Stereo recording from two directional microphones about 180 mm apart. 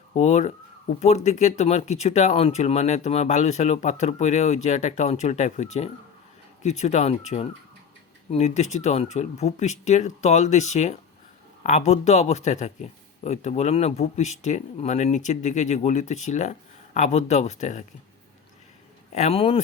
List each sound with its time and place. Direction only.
0.1 s speech: 40° left (ahead or behind)
19.1 s speech: 35° left (ahead or behind)